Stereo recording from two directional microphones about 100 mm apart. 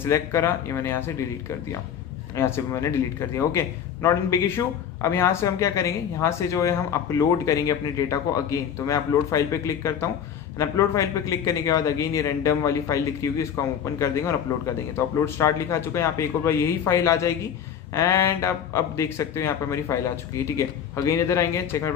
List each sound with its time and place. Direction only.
0.0 s speech: 25° left (ahead or behind)
2.3 s a man's voice: 25° left (ahead or behind)